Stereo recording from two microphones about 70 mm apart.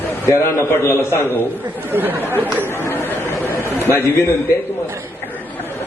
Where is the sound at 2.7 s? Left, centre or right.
Left.